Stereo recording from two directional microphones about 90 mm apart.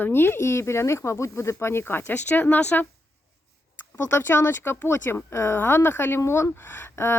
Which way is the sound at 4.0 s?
25° left (ahead or behind).